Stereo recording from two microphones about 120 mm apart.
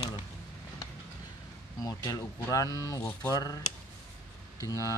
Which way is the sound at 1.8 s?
30° left (ahead or behind).